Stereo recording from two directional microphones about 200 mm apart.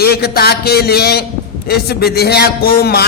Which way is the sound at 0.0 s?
50° left (ahead or behind).